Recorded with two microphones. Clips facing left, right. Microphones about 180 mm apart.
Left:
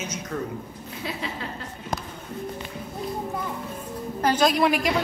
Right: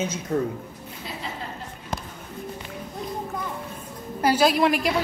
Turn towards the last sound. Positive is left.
turn(degrees=0)  # may be behind; listen again after turning